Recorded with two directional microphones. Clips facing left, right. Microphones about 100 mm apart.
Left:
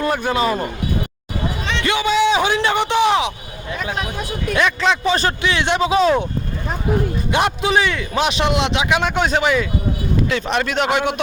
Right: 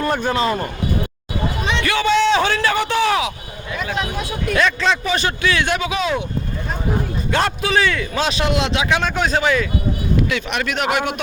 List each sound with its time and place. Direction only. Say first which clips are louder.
0.1 s speech: even; 10° left (ahead or behind)
1.8 s a sound: even; 20° left (ahead or behind)
4.5 s a man's voice: even; 15° left (ahead or behind); by 6.2 s 35° left (ahead or behind)
7.3 s a man's voice: left 1 dB; 20° left (ahead or behind)
10.2 s a man's voice: left 2 dB; 30° left (ahead or behind)